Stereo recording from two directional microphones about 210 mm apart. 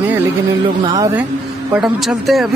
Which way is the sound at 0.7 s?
20° right (ahead or behind).